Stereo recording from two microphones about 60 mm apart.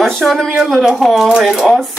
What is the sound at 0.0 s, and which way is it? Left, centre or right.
Speech, centre.